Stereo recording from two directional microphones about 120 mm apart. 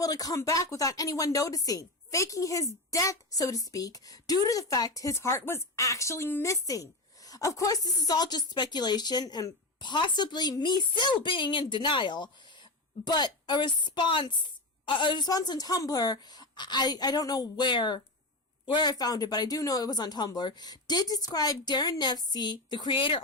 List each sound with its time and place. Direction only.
0.0 s a woman's voice: 30° left (ahead or behind)